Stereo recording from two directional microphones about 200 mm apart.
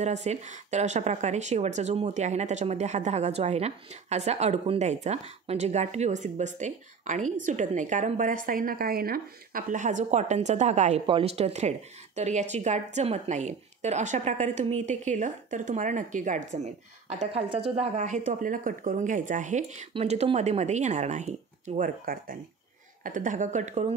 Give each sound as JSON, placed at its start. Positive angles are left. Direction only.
{"t": 0.0, "sound": "a woman's voice", "side_deg": -35}